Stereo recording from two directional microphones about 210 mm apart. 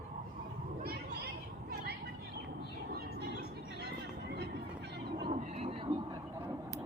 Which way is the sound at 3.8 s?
55° right (ahead or behind).